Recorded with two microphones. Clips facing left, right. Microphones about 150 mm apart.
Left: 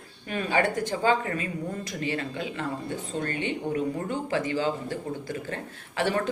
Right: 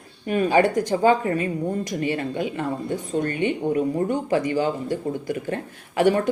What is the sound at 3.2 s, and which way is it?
Speech, 15° right (ahead or behind).